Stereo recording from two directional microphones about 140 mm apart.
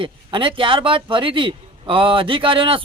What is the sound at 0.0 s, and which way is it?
Speech, 40° right (ahead or behind).